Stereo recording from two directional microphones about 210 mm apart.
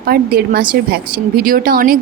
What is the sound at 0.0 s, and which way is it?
Speech, 45° right (ahead or behind).